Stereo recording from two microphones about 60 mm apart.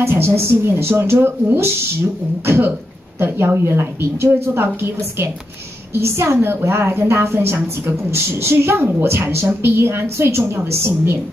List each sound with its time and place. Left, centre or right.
0.0 s a woman's voice: right